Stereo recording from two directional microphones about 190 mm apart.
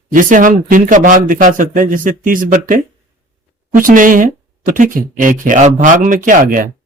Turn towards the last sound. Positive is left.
turn(degrees=-45)  # may be behind; listen again after turning